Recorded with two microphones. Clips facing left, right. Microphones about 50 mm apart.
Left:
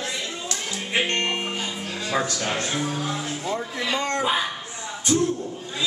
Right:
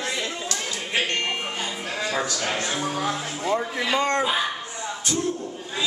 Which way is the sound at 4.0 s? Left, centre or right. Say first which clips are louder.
Right 4 dB; right.